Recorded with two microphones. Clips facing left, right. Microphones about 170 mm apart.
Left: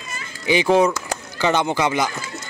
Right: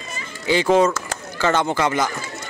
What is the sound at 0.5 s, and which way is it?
Speech, 15° left (ahead or behind).